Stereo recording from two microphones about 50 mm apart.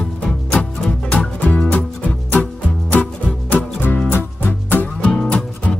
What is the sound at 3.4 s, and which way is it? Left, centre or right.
Music, left.